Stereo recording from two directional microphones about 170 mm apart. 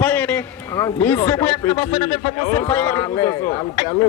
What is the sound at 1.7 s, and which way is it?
Speech, 30° left (ahead or behind).